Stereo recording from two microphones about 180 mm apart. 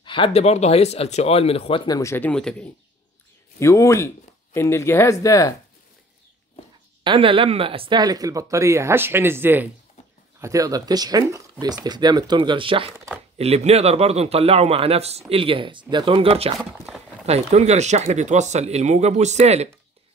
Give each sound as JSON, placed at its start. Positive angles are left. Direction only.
{"t": 0.0, "sound": "speech", "side_deg": 30}
{"t": 1.9, "sound": "speech", "side_deg": 15}
{"t": 3.5, "sound": "speech", "side_deg": 15}
{"t": 7.0, "sound": "speech", "side_deg": -30}
{"t": 16.5, "sound": "speech", "side_deg": 0}
{"t": 17.3, "sound": "speech", "side_deg": -40}